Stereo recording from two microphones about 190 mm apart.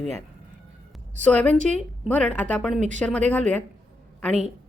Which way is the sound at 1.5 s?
40° right (ahead or behind).